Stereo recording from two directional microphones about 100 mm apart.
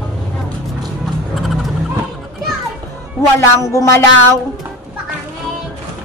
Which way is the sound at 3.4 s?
30° left (ahead or behind).